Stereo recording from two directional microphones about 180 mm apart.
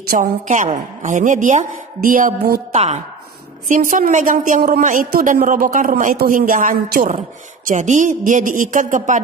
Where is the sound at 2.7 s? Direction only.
35° right (ahead or behind).